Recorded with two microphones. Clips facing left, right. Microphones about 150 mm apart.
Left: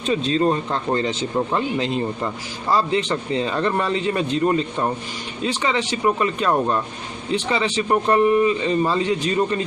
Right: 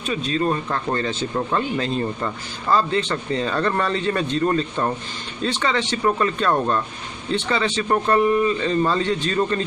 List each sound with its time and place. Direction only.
0.0 s speech: 30° left (ahead or behind)